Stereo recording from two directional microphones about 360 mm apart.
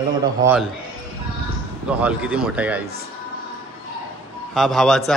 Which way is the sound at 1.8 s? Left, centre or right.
Centre.